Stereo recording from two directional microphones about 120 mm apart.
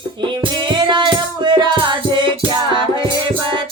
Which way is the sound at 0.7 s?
40° right (ahead or behind).